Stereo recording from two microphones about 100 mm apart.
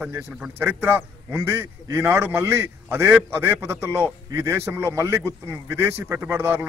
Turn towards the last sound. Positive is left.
turn(degrees=-25)  # may be behind; listen again after turning